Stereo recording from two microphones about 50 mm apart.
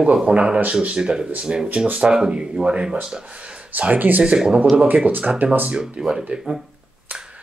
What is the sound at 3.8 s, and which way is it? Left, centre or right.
Speech, right.